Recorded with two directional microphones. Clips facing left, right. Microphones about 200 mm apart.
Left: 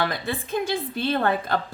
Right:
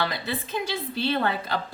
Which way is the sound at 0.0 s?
50° left (ahead or behind).